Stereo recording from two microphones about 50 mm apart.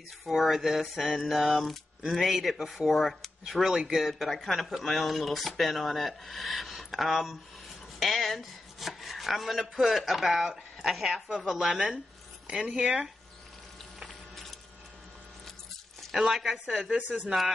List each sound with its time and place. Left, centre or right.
0.3 s speech: centre
8.0 s chopping: centre
11.3 s speech: centre
14.0 s a sound: centre
16.1 s speech: centre
16.9 s speech: right